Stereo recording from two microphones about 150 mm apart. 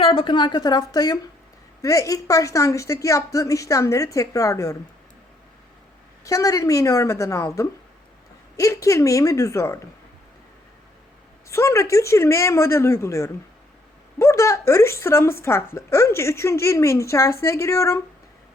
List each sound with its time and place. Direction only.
0.0 s speech: 35° left (ahead or behind); by 4.8 s 20° left (ahead or behind)
6.2 s speech: 25° left (ahead or behind)
11.4 s speech: 20° left (ahead or behind)